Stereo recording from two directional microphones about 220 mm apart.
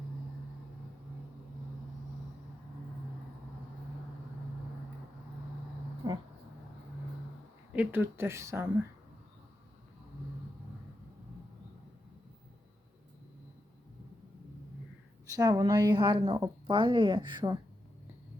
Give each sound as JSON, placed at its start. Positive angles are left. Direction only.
{"t": 6.0, "sound": "a sound", "side_deg": -20}
{"t": 7.7, "sound": "speech", "side_deg": -5}
{"t": 15.3, "sound": "a woman's voice", "side_deg": -15}